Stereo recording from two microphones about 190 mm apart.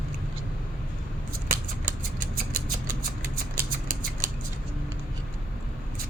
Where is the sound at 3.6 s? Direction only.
45° right (ahead or behind).